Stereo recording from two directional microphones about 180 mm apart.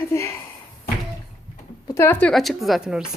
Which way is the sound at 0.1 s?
15° left (ahead or behind).